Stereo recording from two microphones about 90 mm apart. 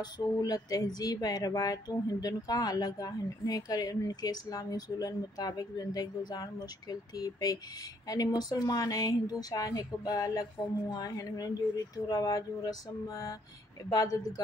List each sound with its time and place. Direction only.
0.0 s speech: 45° left (ahead or behind)
12.1 s a sound: 40° left (ahead or behind)
13.8 s speech: 40° left (ahead or behind)